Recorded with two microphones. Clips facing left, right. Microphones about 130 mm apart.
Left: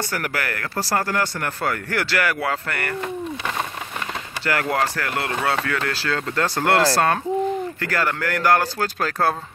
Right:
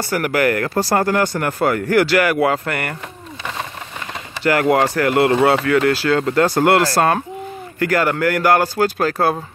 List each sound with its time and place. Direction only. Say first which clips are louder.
0.1 s speech: right 9 dB; 15° right (ahead or behind)
4.5 s speech: right 7 dB; 15° right (ahead or behind)